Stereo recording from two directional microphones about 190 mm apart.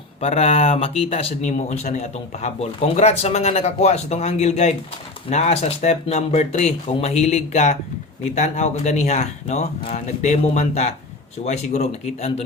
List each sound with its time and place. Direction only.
0.2 s speech: 35° left (ahead or behind)